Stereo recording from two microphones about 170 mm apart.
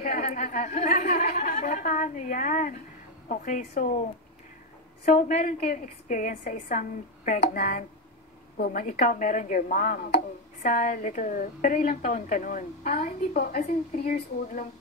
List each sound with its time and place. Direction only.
0.3 s a woman's voice: 50° left (ahead or behind)
5.0 s a woman's voice: 50° left (ahead or behind)